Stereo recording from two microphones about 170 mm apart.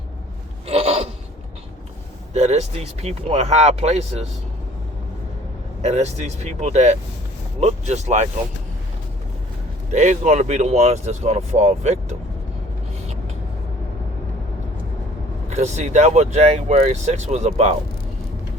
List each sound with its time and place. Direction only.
0.7 s a sound: 35° right (ahead or behind)
2.3 s speech: 40° right (ahead or behind)
5.8 s speech: 40° right (ahead or behind)
9.9 s speech: 45° right (ahead or behind)
15.4 s speech: 45° right (ahead or behind)